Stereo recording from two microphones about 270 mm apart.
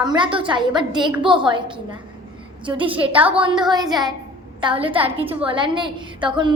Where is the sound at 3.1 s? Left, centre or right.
Centre.